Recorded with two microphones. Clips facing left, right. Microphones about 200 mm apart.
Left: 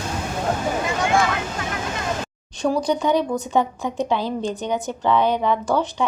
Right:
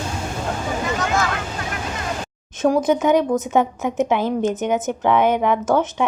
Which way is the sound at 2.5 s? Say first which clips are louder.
Right 4 dB; 20° right (ahead or behind).